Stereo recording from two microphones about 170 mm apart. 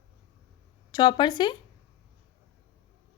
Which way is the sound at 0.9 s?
25° left (ahead or behind).